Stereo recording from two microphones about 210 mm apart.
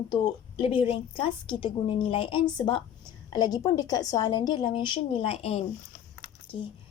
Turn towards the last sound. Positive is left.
turn(degrees=25)  # may be behind; listen again after turning